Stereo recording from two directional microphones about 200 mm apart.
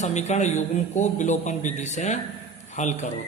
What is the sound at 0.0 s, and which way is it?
A man's voice, 35° left (ahead or behind).